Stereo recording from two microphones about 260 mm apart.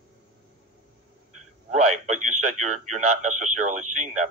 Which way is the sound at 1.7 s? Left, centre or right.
Right.